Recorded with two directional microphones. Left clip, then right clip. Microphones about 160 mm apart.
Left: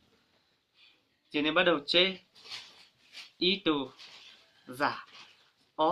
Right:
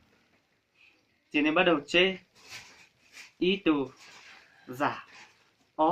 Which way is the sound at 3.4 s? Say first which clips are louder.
Right 2 dB; 15° left (ahead or behind).